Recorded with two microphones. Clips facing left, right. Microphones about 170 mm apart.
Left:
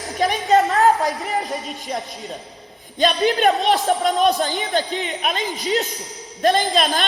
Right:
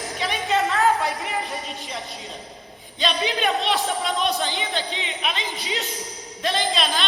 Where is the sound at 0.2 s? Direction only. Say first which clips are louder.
Left 7 dB; 45° left (ahead or behind).